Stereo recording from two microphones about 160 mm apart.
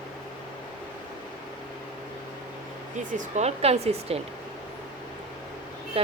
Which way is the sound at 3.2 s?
45° right (ahead or behind).